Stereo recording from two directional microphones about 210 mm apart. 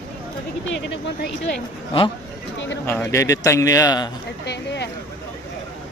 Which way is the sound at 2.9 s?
15° left (ahead or behind).